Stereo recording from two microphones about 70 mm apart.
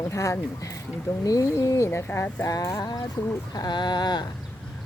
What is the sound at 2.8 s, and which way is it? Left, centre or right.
Speech, left.